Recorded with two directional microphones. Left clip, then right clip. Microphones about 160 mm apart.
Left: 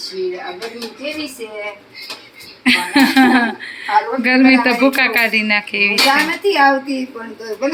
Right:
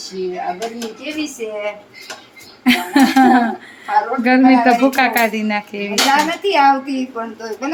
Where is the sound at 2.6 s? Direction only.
10° right (ahead or behind).